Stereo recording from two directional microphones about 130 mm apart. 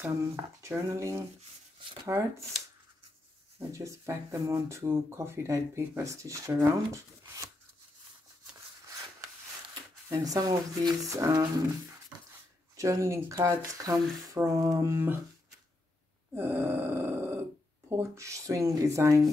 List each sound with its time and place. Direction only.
0.0 s speech: 20° right (ahead or behind)
3.5 s speech: 25° right (ahead or behind)
10.1 s speech: 30° right (ahead or behind)
12.7 s speech: 25° right (ahead or behind)
16.3 s grunt: 20° right (ahead or behind)
17.8 s speech: 20° right (ahead or behind)